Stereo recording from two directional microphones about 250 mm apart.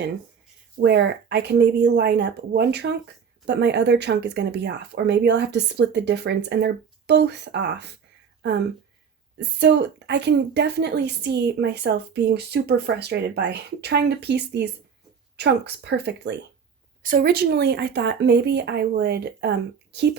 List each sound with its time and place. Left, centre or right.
0.8 s a woman's voice: right